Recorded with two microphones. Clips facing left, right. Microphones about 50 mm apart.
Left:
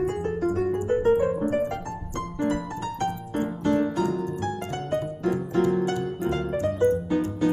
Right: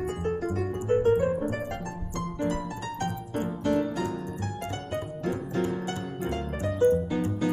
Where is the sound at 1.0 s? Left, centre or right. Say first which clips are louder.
Left 3 dB; left.